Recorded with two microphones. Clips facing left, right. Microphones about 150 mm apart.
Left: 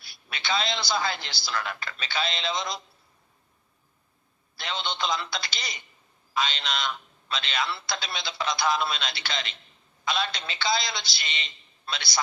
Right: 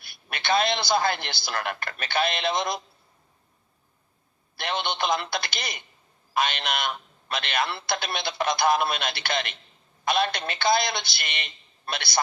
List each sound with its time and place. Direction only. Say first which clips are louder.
0.0 s a man's voice: right 3 dB; 55° right (ahead or behind)
4.5 s a man's voice: right 4 dB; 55° right (ahead or behind)